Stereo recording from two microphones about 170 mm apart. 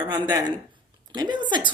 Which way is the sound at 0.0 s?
25° right (ahead or behind).